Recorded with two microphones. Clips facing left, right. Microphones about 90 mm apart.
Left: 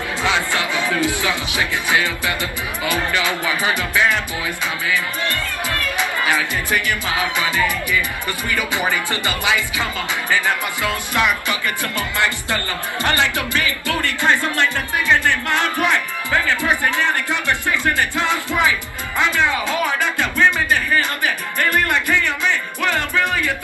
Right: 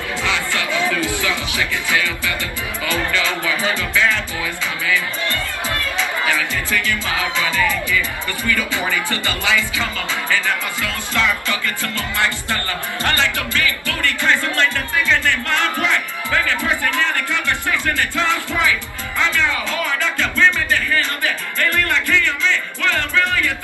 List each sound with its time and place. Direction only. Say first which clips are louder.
0.2 s music: left 3 dB; 20° left (ahead or behind)
1.0 s speech: left 1 dB; 20° left (ahead or behind)
5.3 s music: even; 20° right (ahead or behind)
5.9 s speech: left 1 dB; 20° left (ahead or behind)
13.0 s music: left 1 dB; 20° left (ahead or behind)